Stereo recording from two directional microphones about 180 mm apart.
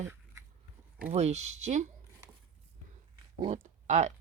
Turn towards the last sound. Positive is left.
turn(degrees=-40)  # may be behind; listen again after turning